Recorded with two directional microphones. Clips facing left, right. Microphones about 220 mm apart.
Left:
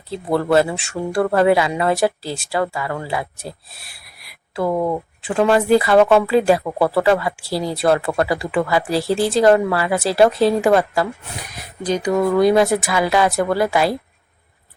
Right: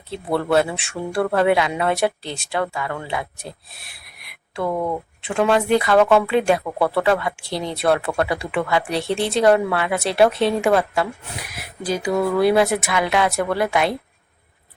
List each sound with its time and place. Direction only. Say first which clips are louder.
0.1 s speech: left 3 dB; centre (ahead or behind)
4.7 s speech: left 4 dB; 20° left (ahead or behind)
5.2 s speech: left 2 dB; 5° left (ahead or behind)